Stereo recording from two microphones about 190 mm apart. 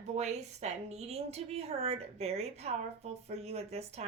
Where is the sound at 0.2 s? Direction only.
35° right (ahead or behind).